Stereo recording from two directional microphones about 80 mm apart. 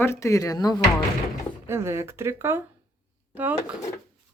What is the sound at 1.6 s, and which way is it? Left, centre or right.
Speech, right.